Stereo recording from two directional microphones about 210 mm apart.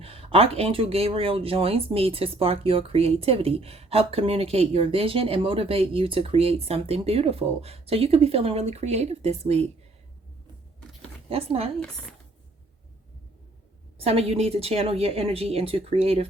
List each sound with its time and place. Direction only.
0.0 s speech: 25° right (ahead or behind)
11.3 s speech: 30° right (ahead or behind)
11.8 s speech: 5° left (ahead or behind)
14.0 s speech: 30° right (ahead or behind)